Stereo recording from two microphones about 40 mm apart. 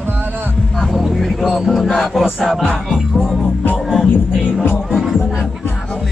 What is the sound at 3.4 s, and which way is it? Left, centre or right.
Music, left.